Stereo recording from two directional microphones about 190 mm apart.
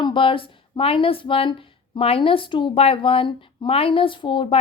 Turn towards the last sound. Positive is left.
turn(degrees=25)  # may be behind; listen again after turning